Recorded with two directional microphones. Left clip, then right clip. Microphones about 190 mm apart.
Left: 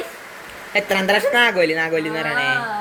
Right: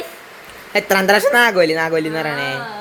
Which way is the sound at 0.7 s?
40° right (ahead or behind).